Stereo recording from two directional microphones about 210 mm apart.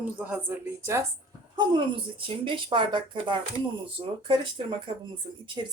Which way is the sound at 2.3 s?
25° right (ahead or behind).